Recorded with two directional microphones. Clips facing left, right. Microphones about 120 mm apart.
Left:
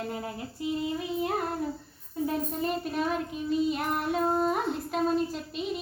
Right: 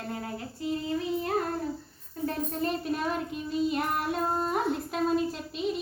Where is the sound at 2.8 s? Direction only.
Centre (ahead or behind).